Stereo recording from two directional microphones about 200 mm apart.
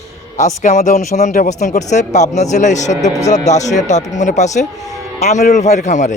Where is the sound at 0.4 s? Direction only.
35° left (ahead or behind).